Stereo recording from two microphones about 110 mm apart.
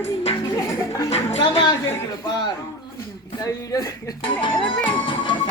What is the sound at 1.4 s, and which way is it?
Music, 45° left (ahead or behind).